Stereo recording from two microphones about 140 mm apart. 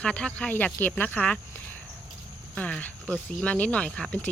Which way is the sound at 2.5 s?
10° left (ahead or behind).